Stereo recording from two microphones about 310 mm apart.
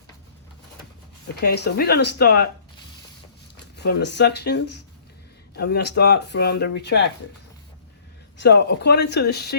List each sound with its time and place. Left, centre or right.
1.6 s speech: left
3.8 s speech: left
8.4 s speech: left